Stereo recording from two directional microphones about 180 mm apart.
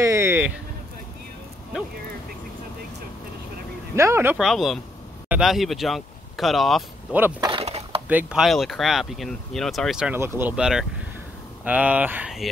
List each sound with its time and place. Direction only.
0.0 s music: 15° right (ahead or behind)
3.9 s speech: 15° right (ahead or behind)
4.4 s speech: centre (ahead or behind)
7.3 s a sound: 20° right (ahead or behind)
7.6 s skateboard: 35° right (ahead or behind)
8.1 s speech: 5° right (ahead or behind)